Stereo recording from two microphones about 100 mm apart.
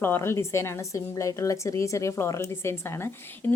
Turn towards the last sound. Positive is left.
turn(degrees=25)  # may be behind; listen again after turning